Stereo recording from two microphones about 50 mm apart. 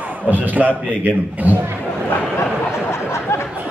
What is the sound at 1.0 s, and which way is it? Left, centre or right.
Speech, right.